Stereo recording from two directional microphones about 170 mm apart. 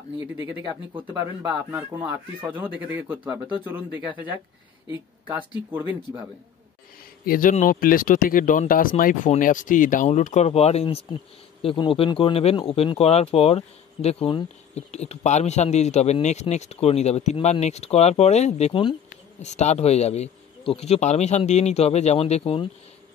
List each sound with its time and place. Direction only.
0.9 s speech: 15° right (ahead or behind)
7.2 s speech: 55° left (ahead or behind); by 18.9 s 30° left (ahead or behind)
19.4 s speech: 40° left (ahead or behind)